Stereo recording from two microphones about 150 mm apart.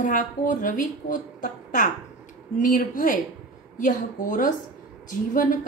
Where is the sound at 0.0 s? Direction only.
60° left (ahead or behind).